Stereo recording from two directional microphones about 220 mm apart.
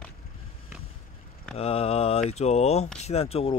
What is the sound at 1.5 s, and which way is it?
Speech, 25° left (ahead or behind).